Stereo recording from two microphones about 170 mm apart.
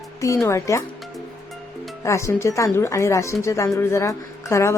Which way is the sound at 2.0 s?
15° left (ahead or behind).